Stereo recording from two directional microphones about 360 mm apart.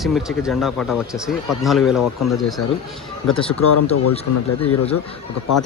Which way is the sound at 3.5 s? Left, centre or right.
Left.